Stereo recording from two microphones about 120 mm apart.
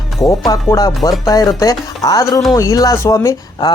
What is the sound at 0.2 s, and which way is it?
Speech, 30° left (ahead or behind).